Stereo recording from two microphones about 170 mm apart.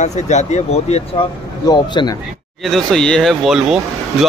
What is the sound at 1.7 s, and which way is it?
Speech, 20° left (ahead or behind).